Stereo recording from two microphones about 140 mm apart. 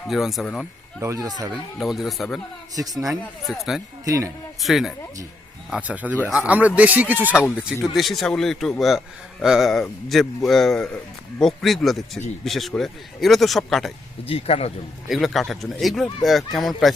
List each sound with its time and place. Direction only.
0.1 s speech: centre (ahead or behind)
1.0 s speech: 20° right (ahead or behind)
1.8 s speech: centre (ahead or behind)
4.0 s speech: 25° right (ahead or behind)
4.6 s speech: centre (ahead or behind)
14.3 s speech: 45° left (ahead or behind)
15.1 s speech: centre (ahead or behind)